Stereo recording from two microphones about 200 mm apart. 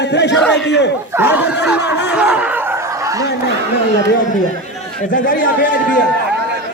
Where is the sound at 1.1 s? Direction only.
10° right (ahead or behind).